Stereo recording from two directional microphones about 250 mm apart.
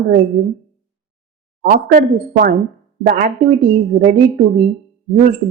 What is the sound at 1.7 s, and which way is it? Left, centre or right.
Speech, right.